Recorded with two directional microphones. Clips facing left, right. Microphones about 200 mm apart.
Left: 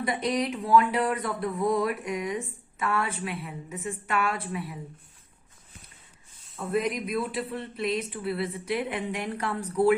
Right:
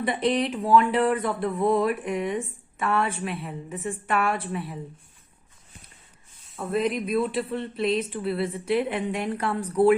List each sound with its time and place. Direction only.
0.0 s speech: 30° right (ahead or behind)
6.7 s speech: 30° right (ahead or behind)